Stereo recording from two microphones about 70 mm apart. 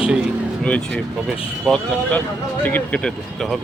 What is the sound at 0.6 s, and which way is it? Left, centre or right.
Speech, centre.